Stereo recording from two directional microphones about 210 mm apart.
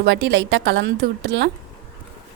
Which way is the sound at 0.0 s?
60° right (ahead or behind).